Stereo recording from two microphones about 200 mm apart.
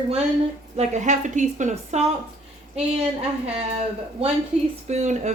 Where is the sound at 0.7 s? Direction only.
35° right (ahead or behind).